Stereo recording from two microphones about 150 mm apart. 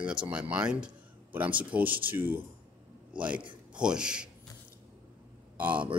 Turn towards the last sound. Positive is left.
turn(degrees=-10)  # may be behind; listen again after turning